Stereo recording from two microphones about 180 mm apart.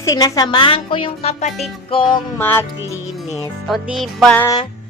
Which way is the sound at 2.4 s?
10° left (ahead or behind).